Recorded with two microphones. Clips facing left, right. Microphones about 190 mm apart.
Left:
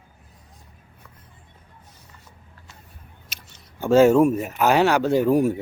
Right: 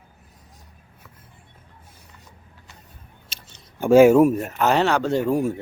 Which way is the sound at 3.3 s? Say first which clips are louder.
Even; 30° right (ahead or behind).